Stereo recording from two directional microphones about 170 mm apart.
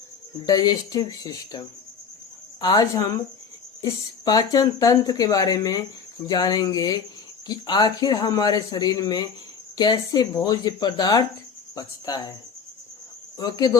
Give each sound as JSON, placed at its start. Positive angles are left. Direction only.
{"t": 0.4, "sound": "speech", "side_deg": 25}
{"t": 4.3, "sound": "speech", "side_deg": 20}
{"t": 13.4, "sound": "speech", "side_deg": 25}